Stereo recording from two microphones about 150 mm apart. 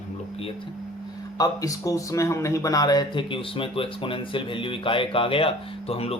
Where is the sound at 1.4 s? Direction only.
25° left (ahead or behind); by 6.2 s 40° left (ahead or behind).